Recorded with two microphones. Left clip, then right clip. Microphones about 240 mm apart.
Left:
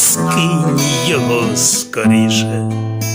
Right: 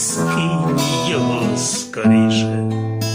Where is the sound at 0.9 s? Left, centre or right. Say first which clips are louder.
Left 4 dB; left.